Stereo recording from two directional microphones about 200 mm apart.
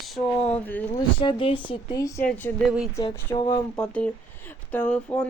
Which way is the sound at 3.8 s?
5° left (ahead or behind).